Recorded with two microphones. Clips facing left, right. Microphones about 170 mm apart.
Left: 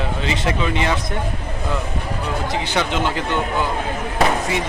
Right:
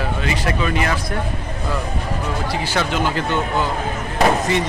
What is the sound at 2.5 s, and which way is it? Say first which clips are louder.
Speech: even; 20° left (ahead or behind).